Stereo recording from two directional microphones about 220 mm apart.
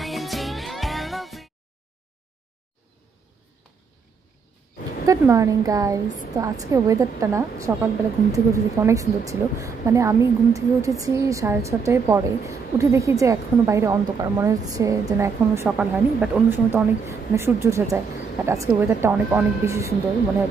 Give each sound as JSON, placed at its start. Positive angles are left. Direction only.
{"t": 0.0, "sound": "music", "side_deg": 0}
{"t": 5.0, "sound": "a woman's voice", "side_deg": -15}